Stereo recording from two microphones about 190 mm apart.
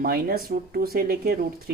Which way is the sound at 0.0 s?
50° right (ahead or behind).